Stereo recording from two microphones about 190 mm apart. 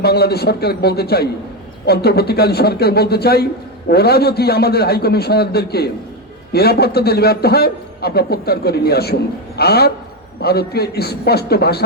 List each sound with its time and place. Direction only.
0.0 s a man's voice: 55° left (ahead or behind)